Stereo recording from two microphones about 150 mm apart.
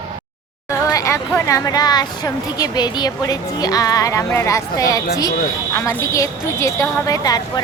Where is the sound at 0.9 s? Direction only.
20° left (ahead or behind).